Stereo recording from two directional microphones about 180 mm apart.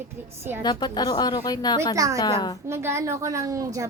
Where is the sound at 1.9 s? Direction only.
20° right (ahead or behind).